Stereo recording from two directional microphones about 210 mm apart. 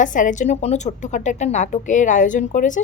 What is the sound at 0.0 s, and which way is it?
A woman's voice, 40° left (ahead or behind).